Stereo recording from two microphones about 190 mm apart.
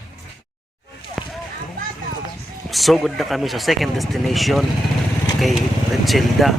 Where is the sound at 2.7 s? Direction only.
Centre (ahead or behind).